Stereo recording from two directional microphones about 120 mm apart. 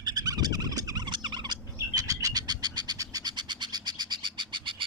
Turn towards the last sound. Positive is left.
turn(degrees=-40)  # may be behind; listen again after turning